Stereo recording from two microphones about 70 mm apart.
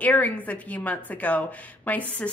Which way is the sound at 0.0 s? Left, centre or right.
Left.